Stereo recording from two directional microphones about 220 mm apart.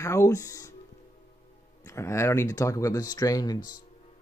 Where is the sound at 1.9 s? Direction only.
10° left (ahead or behind).